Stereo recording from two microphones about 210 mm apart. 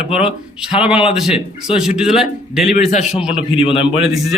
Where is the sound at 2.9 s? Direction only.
35° left (ahead or behind).